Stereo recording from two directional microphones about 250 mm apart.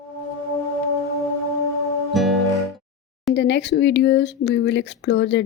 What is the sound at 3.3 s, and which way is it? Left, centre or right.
Speech, left.